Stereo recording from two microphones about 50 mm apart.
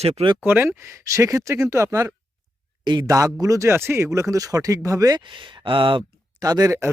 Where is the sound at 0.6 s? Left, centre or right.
Right.